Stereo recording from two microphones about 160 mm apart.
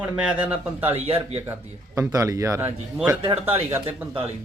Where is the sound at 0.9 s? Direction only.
35° right (ahead or behind).